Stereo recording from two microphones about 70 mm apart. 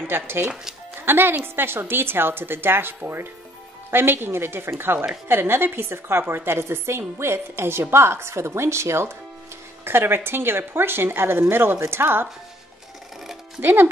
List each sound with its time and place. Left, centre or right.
0.0 s a woman's voice: right
13.6 s a woman's voice: right